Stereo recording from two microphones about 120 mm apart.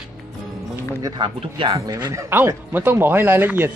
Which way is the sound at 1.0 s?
45° right (ahead or behind).